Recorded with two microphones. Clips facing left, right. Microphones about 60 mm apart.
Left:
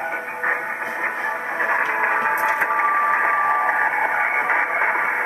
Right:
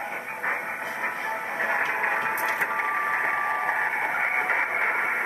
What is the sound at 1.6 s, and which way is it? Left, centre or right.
Music, left.